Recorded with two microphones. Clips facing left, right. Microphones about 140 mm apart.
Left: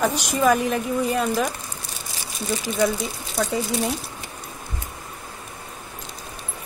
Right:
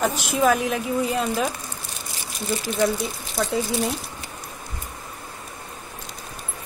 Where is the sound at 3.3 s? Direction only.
Centre (ahead or behind).